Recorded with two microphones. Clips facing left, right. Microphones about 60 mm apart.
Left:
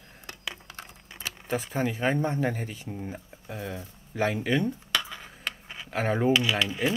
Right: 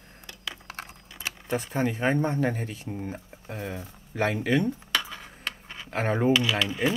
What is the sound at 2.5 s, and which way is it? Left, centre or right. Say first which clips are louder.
Speech: right 1 dB; right.